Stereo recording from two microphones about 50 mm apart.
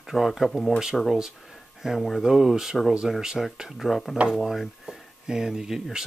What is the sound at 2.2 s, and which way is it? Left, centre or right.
Speech, centre.